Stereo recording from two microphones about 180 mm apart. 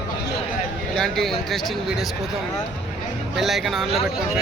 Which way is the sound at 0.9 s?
Centre (ahead or behind).